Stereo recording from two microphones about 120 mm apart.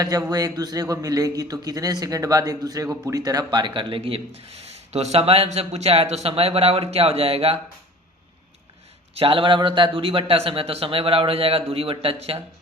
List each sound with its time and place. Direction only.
0.0 s a man's voice: 30° right (ahead or behind); by 7.6 s 55° right (ahead or behind)
9.1 s a man's voice: 50° right (ahead or behind)